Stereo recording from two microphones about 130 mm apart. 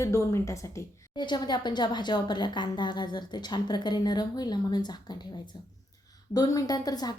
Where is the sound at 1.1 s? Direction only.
35° left (ahead or behind).